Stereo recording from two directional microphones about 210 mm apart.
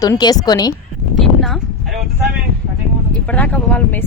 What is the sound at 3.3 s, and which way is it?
Speech, 5° left (ahead or behind).